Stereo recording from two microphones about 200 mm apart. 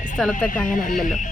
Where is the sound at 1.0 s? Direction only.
40° left (ahead or behind).